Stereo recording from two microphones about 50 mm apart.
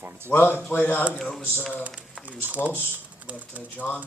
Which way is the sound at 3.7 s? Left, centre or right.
Left.